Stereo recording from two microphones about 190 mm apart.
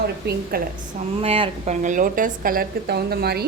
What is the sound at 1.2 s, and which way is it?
A woman's voice, 30° right (ahead or behind).